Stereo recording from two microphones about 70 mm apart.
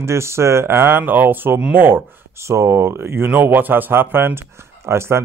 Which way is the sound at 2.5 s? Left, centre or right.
Right.